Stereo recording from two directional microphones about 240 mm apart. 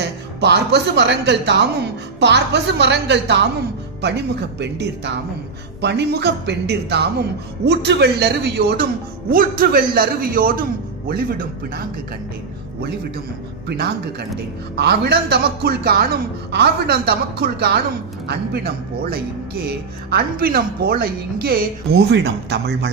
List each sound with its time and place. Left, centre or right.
0.3 s speech: right
13.7 s speech: right